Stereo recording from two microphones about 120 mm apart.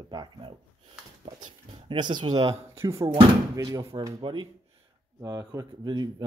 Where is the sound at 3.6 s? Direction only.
40° right (ahead or behind).